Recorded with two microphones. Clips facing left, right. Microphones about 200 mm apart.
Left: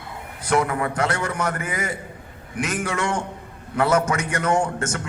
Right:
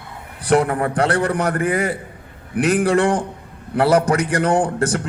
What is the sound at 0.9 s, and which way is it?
A man's voice, 35° right (ahead or behind).